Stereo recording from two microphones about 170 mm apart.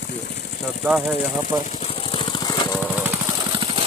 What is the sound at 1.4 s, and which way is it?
Vehicle, 40° left (ahead or behind).